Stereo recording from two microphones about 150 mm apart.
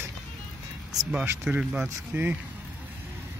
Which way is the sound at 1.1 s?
10° right (ahead or behind).